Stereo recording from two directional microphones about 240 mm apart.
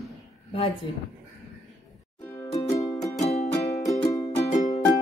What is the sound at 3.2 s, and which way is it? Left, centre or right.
Music, left.